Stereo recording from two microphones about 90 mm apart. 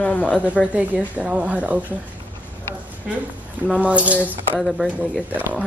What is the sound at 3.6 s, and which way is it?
Speech, 15° right (ahead or behind).